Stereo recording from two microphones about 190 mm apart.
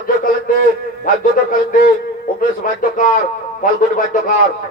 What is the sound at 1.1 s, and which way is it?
Speech, 45° left (ahead or behind).